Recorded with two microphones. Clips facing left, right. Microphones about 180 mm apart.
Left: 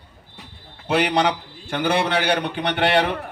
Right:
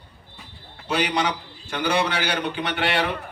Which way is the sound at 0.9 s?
55° left (ahead or behind).